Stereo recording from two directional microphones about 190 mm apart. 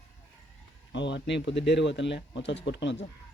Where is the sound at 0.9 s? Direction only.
70° left (ahead or behind).